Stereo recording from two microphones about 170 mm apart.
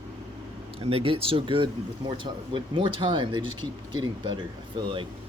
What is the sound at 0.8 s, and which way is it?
Speech, 35° right (ahead or behind).